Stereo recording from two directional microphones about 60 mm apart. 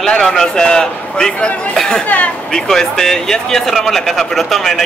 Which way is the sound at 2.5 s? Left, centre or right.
Centre.